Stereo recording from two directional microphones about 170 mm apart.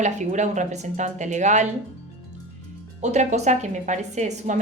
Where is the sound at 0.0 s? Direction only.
45° right (ahead or behind).